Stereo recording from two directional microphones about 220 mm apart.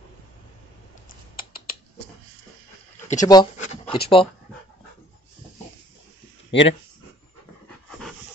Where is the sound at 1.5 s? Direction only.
40° left (ahead or behind).